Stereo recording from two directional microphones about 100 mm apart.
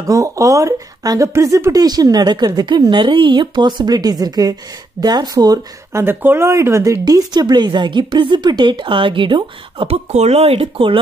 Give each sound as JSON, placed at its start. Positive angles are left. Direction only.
{"t": 0.0, "sound": "speech", "side_deg": -35}
{"t": 6.0, "sound": "a woman's voice", "side_deg": -25}